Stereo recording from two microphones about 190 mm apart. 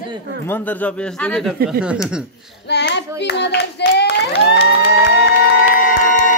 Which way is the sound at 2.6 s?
60° left (ahead or behind).